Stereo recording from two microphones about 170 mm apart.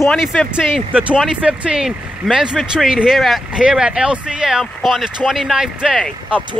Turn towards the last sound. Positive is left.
turn(degrees=0)  # may be behind; listen again after turning